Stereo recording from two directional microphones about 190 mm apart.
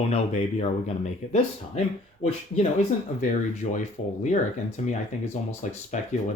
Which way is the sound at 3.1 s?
40° left (ahead or behind).